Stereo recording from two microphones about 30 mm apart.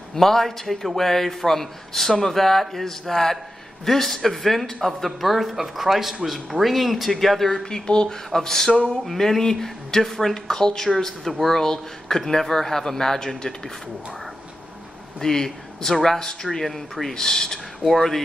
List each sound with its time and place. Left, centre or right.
0.1 s a man's voice: centre
7.6 s speech: left
8.3 s a man's voice: centre
15.1 s a man's voice: centre
17.1 s speech: left
17.8 s a man's voice: centre